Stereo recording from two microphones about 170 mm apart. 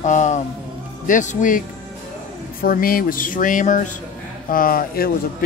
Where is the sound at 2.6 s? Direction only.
60° left (ahead or behind).